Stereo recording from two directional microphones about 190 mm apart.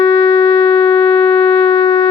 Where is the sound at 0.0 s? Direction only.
20° left (ahead or behind).